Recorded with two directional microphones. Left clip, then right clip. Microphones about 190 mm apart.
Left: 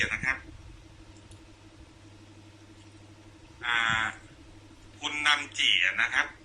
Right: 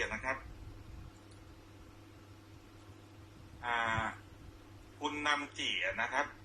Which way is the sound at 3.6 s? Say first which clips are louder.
Left 7 dB; 40° right (ahead or behind).